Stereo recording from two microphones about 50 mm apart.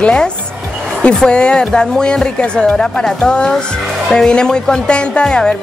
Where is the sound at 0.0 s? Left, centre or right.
Left.